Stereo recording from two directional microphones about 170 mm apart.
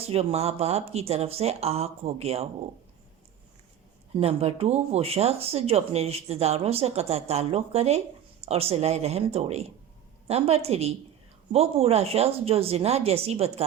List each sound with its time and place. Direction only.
0.0 s speech: 35° right (ahead or behind)
4.1 s speech: 35° right (ahead or behind)